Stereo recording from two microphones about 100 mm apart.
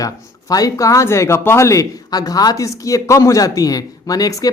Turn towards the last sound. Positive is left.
turn(degrees=40)  # may be behind; listen again after turning